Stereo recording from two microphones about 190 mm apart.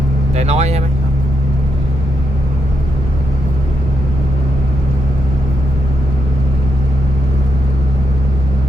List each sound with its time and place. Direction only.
0.3 s speech: 35° right (ahead or behind)